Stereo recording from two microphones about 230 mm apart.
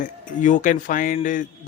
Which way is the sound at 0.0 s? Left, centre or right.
Left.